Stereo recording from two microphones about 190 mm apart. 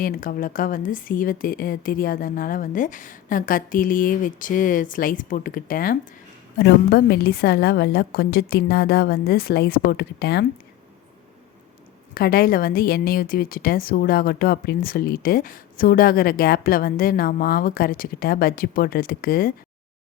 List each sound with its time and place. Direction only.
0.0 s a woman's voice: 45° left (ahead or behind)
12.1 s a woman's voice: 55° left (ahead or behind)